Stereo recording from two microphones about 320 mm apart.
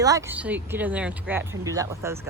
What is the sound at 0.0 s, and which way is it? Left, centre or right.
Speech, centre.